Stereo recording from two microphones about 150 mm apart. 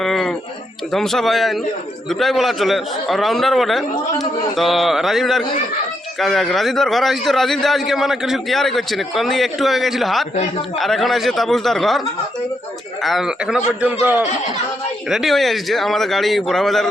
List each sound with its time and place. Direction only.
0.0 s a sound: centre (ahead or behind)
0.9 s a man's voice: centre (ahead or behind)
15.1 s a man's voice: centre (ahead or behind)